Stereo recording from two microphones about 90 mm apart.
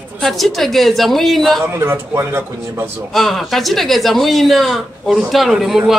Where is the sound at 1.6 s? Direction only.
30° right (ahead or behind).